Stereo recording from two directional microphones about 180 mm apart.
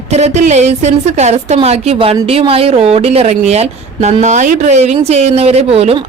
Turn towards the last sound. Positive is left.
turn(degrees=-35)  # may be behind; listen again after turning